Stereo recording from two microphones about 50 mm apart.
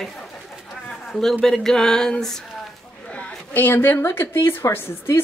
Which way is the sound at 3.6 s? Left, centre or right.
Left.